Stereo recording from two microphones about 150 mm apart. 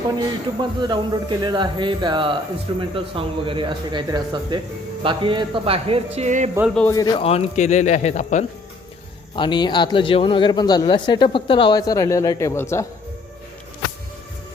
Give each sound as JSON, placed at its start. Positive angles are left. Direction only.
{"t": 0.2, "sound": "a man's voice", "side_deg": -30}
{"t": 6.9, "sound": "speech", "side_deg": 25}
{"t": 7.2, "sound": "speech", "side_deg": 40}
{"t": 9.3, "sound": "a man's voice", "side_deg": 30}